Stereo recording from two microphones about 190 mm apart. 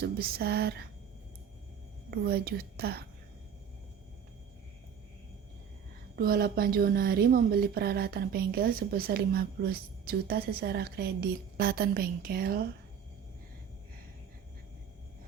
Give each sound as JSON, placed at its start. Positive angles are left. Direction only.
{"t": 0.2, "sound": "a woman's voice", "side_deg": -55}
{"t": 2.0, "sound": "a woman's voice", "side_deg": -55}
{"t": 6.1, "sound": "a woman's voice", "side_deg": -50}